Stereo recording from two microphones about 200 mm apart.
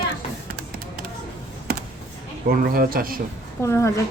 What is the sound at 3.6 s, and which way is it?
Speech, 15° left (ahead or behind).